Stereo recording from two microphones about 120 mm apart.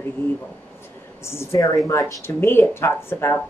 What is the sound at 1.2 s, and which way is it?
Speech, 20° left (ahead or behind).